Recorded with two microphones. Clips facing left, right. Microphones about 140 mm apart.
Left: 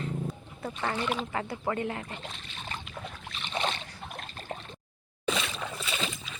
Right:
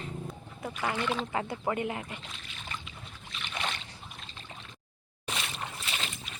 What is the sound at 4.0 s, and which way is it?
Trickle, 60° left (ahead or behind).